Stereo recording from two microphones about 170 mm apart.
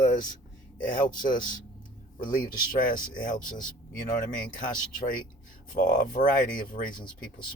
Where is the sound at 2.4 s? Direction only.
55° left (ahead or behind).